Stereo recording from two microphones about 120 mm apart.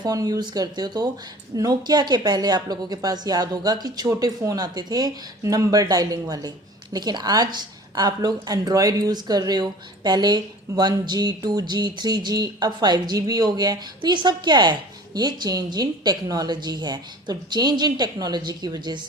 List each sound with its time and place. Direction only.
0.0 s a woman's voice: 30° right (ahead or behind)